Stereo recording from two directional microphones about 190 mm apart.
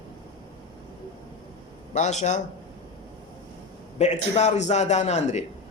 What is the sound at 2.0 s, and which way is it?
Speech, 40° left (ahead or behind).